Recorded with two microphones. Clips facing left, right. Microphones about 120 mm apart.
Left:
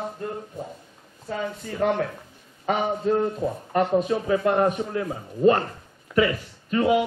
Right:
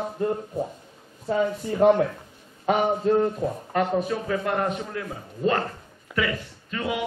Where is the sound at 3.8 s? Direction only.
20° left (ahead or behind).